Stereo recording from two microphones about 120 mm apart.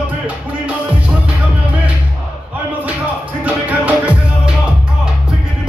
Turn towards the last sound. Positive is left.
turn(degrees=-10)  # may be behind; listen again after turning